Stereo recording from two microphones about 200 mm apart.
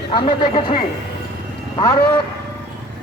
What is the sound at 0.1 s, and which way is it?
Speech, 25° left (ahead or behind).